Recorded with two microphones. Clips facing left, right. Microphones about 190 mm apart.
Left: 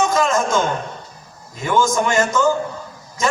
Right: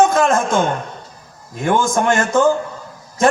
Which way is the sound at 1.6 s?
55° right (ahead or behind).